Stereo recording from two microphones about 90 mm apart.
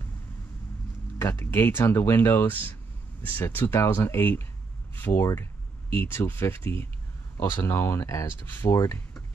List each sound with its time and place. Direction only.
1.1 s speech: 25° left (ahead or behind)